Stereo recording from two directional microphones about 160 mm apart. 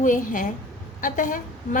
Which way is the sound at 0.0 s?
55° left (ahead or behind).